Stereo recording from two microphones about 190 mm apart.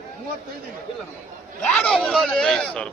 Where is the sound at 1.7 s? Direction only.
5° left (ahead or behind).